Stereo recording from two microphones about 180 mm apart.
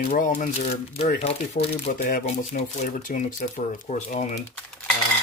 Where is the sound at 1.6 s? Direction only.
50° left (ahead or behind).